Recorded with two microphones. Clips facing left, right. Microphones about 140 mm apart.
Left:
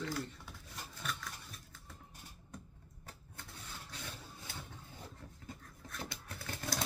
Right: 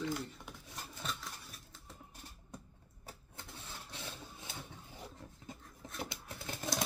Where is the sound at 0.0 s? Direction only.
20° right (ahead or behind).